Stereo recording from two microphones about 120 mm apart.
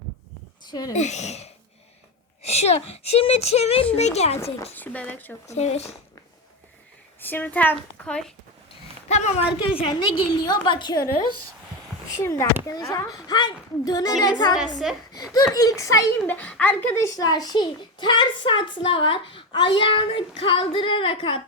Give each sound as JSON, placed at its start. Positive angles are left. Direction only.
{"t": 0.7, "sound": "a woman's voice", "side_deg": 35}
{"t": 0.9, "sound": "speech", "side_deg": 75}
{"t": 4.6, "sound": "a woman's voice", "side_deg": 15}
{"t": 5.5, "sound": "speech", "side_deg": 65}
{"t": 7.2, "sound": "a woman's voice", "side_deg": 15}
{"t": 9.0, "sound": "speech", "side_deg": 65}
{"t": 9.5, "sound": "a woman's voice", "side_deg": 45}
{"t": 16.2, "sound": "a woman's voice", "side_deg": 10}
{"t": 16.9, "sound": "a child's voice", "side_deg": 25}
{"t": 17.2, "sound": "a child's voice", "side_deg": 35}